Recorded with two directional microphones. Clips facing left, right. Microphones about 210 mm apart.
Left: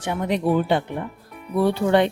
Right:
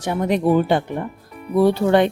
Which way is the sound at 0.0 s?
40° right (ahead or behind).